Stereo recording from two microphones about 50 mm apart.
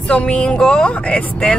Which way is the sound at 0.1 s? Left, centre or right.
Centre.